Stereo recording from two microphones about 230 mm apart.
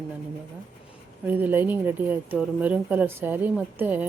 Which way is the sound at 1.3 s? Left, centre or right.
Centre.